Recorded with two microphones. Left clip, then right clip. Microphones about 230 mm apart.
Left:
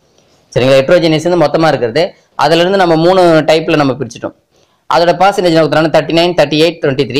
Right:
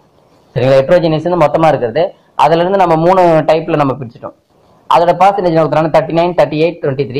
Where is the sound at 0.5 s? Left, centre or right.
Left.